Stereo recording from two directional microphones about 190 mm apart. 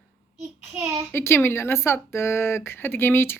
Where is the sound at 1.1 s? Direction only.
15° left (ahead or behind).